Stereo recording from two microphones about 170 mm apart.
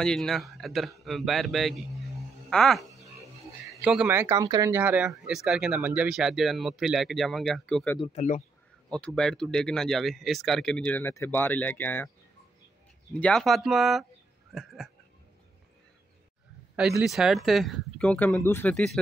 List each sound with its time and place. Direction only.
0.0 s speech: 5° left (ahead or behind)
8.0 s speech: 40° left (ahead or behind)
8.9 s speech: 5° left (ahead or behind)
13.1 s speech: 5° left (ahead or behind)
14.5 s a sound: centre (ahead or behind)
17.0 s speech: centre (ahead or behind)